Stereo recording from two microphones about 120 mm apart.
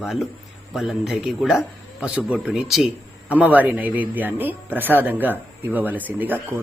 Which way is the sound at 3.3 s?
10° right (ahead or behind).